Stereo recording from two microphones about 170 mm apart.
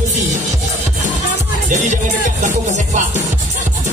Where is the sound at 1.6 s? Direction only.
45° right (ahead or behind).